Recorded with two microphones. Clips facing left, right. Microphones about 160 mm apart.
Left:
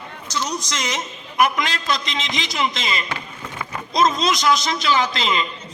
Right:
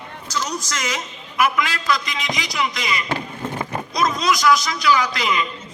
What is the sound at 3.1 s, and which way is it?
Vehicle, 35° right (ahead or behind).